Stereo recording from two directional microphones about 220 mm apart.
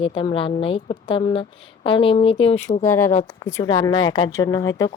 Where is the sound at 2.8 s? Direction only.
15° left (ahead or behind).